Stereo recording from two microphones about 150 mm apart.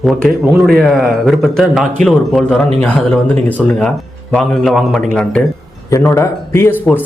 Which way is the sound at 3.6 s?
5° left (ahead or behind).